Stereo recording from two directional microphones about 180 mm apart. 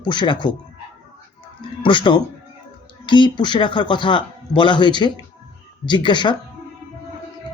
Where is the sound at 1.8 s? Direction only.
25° left (ahead or behind).